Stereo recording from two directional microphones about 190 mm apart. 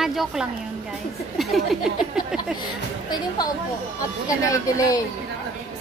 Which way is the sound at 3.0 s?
20° left (ahead or behind).